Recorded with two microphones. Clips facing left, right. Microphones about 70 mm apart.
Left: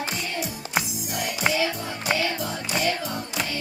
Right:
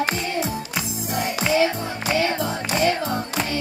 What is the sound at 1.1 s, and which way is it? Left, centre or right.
Music, right.